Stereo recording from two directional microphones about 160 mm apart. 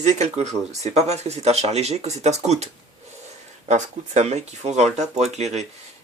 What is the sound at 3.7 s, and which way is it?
Speech, 45° right (ahead or behind).